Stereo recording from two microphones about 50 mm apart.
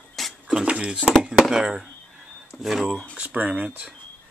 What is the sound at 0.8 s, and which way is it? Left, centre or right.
Speech, centre.